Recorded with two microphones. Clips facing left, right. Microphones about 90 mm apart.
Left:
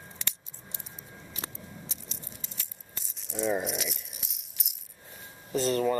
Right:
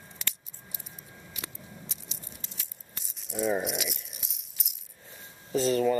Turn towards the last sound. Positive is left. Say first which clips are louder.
# right 2 dB
turn(degrees=0)  # may be behind; listen again after turning